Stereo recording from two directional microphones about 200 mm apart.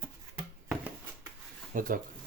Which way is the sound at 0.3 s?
10° right (ahead or behind).